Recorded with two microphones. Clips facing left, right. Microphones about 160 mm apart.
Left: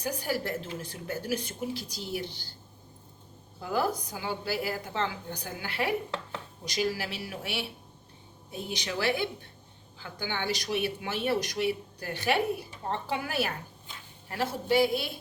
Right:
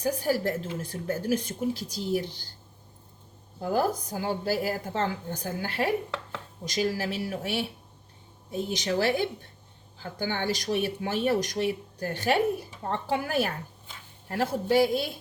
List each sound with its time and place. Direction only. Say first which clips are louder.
0.0 s a woman's voice: right 5 dB; 45° right (ahead or behind)
3.6 s a woman's voice: right 3 dB; 45° right (ahead or behind)